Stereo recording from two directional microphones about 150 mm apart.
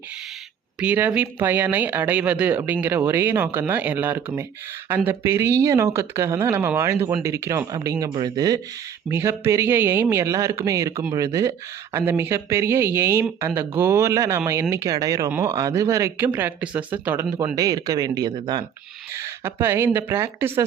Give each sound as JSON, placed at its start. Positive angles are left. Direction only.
{"t": 0.8, "sound": "speech", "side_deg": -10}
{"t": 17.5, "sound": "speech", "side_deg": -25}
{"t": 19.1, "sound": "speech", "side_deg": -20}